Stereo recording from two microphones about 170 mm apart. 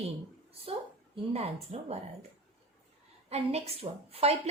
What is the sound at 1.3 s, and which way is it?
Speech, 40° right (ahead or behind).